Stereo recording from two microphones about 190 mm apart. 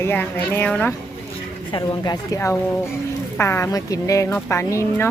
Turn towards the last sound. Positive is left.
turn(degrees=15)  # may be behind; listen again after turning